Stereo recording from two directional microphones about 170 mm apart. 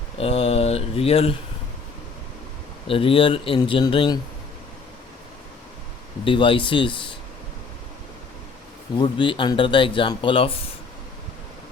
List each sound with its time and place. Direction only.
0.2 s speech: 35° left (ahead or behind)
2.8 s speech: 30° left (ahead or behind)
6.2 s speech: 30° left (ahead or behind)
9.0 s speech: 30° left (ahead or behind)